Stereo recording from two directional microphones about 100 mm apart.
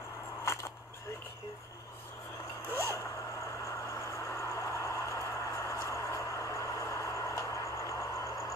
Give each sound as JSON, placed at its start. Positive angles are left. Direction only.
{"t": 3.6, "sound": "vehicle", "side_deg": 30}